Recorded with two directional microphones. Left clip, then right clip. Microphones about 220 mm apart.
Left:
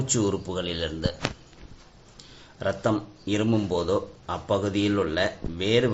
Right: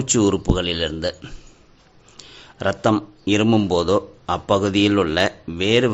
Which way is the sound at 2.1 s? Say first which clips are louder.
Right 7 dB; 50° right (ahead or behind).